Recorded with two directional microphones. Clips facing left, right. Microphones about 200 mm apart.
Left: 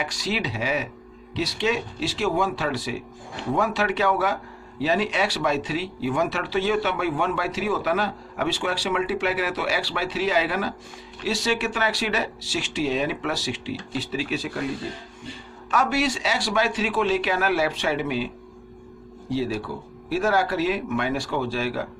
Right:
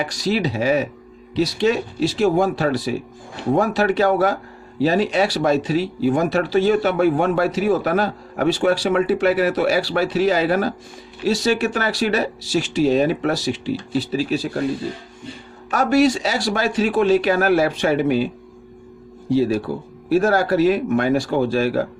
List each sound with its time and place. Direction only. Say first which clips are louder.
0.0 s speech: right 7 dB; 40° right (ahead or behind)
15.7 s speech: right 7 dB; 40° right (ahead or behind)
19.3 s speech: right 8 dB; 45° right (ahead or behind)